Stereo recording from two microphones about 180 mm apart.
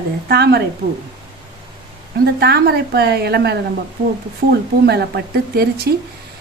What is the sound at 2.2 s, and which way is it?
A woman's voice, 60° right (ahead or behind).